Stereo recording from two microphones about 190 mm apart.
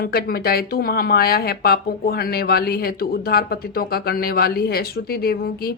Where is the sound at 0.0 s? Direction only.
55° left (ahead or behind).